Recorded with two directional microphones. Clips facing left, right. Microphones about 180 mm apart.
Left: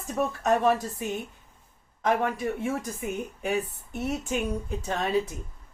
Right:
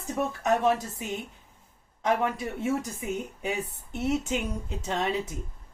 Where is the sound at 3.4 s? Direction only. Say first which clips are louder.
Left 5 dB; 20° right (ahead or behind).